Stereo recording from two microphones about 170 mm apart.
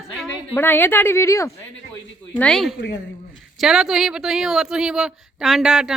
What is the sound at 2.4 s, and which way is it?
Speech, 5° left (ahead or behind).